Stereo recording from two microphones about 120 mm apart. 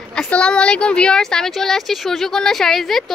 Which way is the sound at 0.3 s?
10° left (ahead or behind).